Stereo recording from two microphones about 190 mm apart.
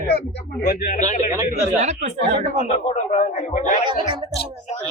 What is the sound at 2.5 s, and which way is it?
Speech, 35° left (ahead or behind).